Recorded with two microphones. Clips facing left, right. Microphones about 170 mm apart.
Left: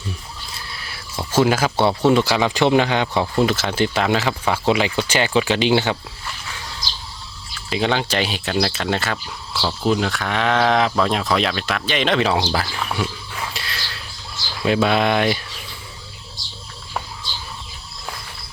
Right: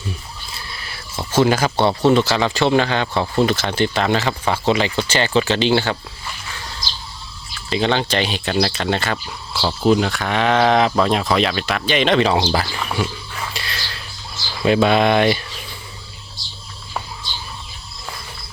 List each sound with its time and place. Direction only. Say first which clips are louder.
0.7 s a sound: right 1 dB; centre (ahead or behind)
1.3 s speech: right 1 dB; 5° left (ahead or behind)
7.7 s speech: right 2 dB; 5° left (ahead or behind)
13.5 s whispering: right 1 dB; centre (ahead or behind)
14.6 s speech: right 3 dB; centre (ahead or behind)